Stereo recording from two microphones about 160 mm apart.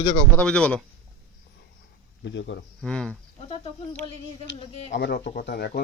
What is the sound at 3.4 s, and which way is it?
Speech, 35° left (ahead or behind).